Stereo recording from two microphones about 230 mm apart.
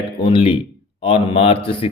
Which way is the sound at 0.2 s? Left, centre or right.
Left.